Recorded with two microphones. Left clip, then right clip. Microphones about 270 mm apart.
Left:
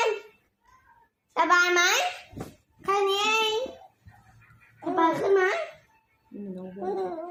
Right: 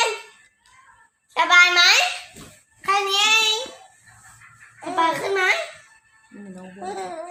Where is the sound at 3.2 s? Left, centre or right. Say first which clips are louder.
Right 7 dB; centre.